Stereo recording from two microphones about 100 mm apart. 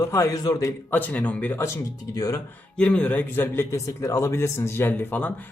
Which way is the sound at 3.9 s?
30° left (ahead or behind).